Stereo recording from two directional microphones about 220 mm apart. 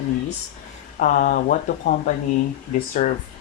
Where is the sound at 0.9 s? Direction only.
35° left (ahead or behind).